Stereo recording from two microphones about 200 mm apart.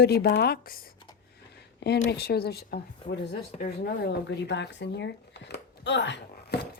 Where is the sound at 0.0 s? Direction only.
55° left (ahead or behind).